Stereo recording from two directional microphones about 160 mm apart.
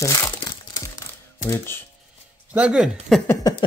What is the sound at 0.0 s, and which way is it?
Crumpling, 20° left (ahead or behind).